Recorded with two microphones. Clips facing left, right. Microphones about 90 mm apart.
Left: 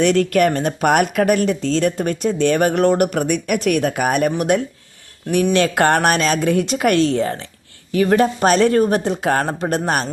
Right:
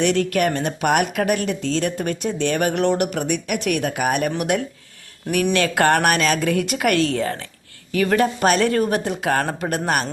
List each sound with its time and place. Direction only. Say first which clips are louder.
0.0 s a woman's voice: left 4 dB; 45° left (ahead or behind); by 10.1 s 30° left (ahead or behind)